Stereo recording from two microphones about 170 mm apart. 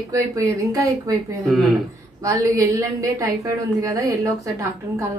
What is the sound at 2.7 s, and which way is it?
A woman's voice, 20° right (ahead or behind).